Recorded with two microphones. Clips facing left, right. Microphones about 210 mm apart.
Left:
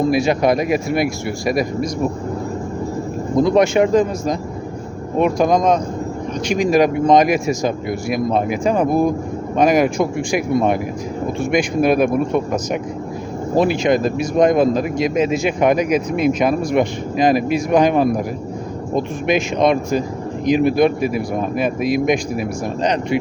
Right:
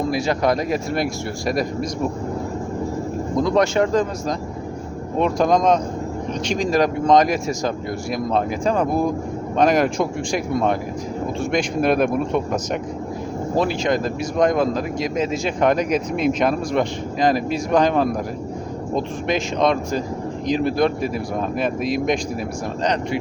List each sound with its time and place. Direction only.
0.1 s speech: 15° left (ahead or behind)
3.5 s speech: 15° left (ahead or behind)
6.7 s speech: 15° left (ahead or behind)
13.6 s speech: 15° left (ahead or behind)